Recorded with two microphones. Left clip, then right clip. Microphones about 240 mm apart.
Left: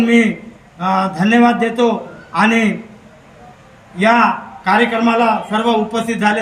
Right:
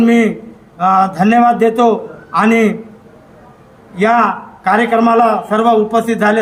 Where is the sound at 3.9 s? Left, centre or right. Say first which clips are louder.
Right 1 dB; centre.